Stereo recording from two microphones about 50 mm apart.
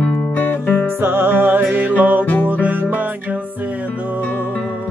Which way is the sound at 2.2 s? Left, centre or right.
Left.